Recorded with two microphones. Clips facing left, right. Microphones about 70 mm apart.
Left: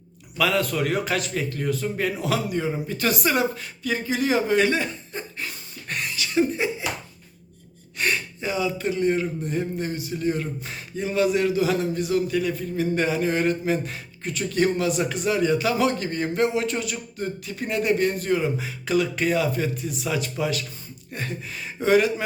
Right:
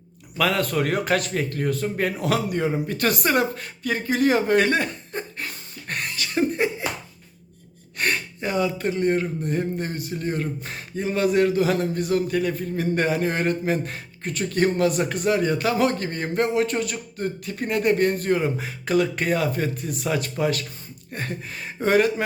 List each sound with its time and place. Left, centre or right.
0.3 s a man's voice: right
7.9 s speech: right